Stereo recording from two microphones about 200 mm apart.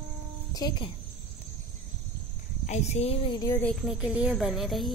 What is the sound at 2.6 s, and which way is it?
Speech, 35° left (ahead or behind).